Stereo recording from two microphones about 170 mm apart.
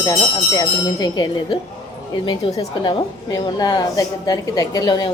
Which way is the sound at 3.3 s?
25° left (ahead or behind).